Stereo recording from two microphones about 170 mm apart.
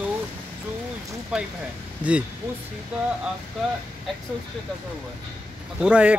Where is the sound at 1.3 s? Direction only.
5° right (ahead or behind).